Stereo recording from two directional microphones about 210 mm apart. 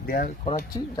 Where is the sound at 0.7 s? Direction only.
25° left (ahead or behind).